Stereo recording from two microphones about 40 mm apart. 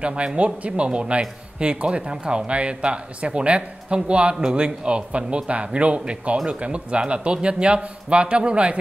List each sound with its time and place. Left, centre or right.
0.0 s speech: right